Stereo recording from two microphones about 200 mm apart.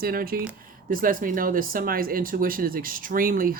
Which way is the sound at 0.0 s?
50° right (ahead or behind).